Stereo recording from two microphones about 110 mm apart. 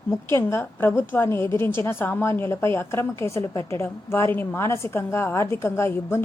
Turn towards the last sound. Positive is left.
turn(degrees=25)  # may be behind; listen again after turning